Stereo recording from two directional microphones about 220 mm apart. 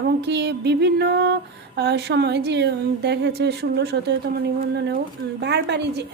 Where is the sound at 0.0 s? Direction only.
50° right (ahead or behind).